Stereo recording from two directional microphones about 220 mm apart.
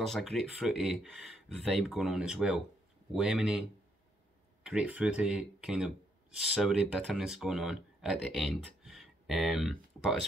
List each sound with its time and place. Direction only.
0.0 s speech: centre (ahead or behind)
4.6 s speech: 5° right (ahead or behind)